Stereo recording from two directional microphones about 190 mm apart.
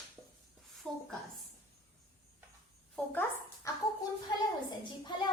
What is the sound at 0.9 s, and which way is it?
Speech, 5° left (ahead or behind).